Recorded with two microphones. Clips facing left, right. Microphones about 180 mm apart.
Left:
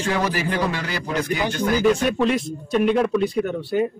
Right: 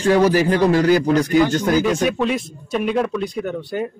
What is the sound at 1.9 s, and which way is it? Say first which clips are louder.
Speech: even; centre (ahead or behind).